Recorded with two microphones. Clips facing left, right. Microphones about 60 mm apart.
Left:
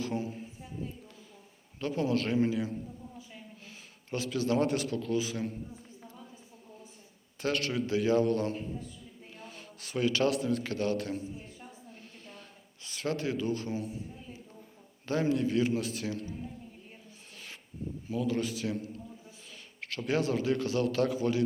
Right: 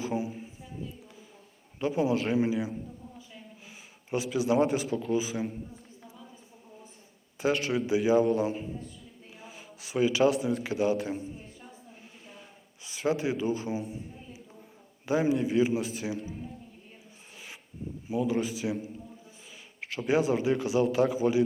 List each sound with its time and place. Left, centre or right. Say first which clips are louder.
0.0 s a sound: right 2 dB; centre
1.8 s a man's voice: right 3 dB; centre
4.1 s a man's voice: right 3 dB; centre
7.3 s a man's voice: right 4 dB; centre
11.9 s a sound: even; centre
15.0 s a man's voice: right 3 dB; centre
18.1 s a man's voice: right 3 dB; centre